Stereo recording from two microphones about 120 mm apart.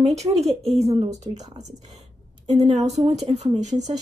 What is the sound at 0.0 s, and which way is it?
Speech, 65° right (ahead or behind).